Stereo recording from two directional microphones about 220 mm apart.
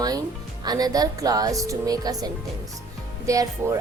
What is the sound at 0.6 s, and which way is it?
A woman's voice, 15° right (ahead or behind).